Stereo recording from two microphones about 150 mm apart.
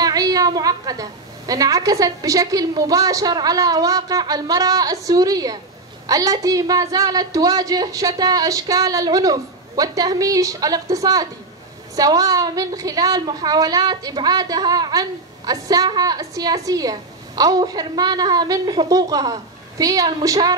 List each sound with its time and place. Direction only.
0.0 s a woman's voice: 25° right (ahead or behind)